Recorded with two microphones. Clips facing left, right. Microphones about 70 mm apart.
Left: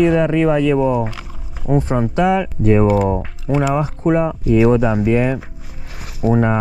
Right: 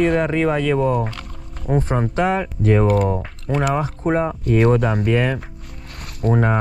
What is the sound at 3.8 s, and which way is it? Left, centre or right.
Speech, right.